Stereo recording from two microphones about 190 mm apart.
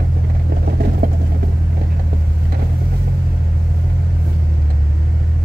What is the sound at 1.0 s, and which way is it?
Vehicle, 50° right (ahead or behind).